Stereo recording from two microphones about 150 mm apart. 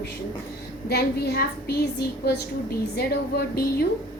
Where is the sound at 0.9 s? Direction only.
90° left.